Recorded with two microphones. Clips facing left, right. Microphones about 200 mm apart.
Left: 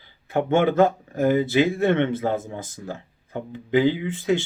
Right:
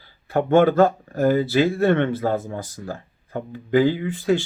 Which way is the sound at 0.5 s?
20° left (ahead or behind).